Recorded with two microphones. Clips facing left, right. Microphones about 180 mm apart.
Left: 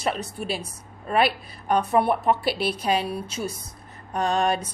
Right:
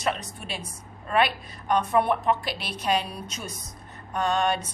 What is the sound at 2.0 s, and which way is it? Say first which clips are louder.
A woman's voice: left 3 dB; 5° left (ahead or behind).